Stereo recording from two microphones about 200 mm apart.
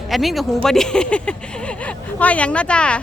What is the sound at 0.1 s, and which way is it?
Speech, centre (ahead or behind).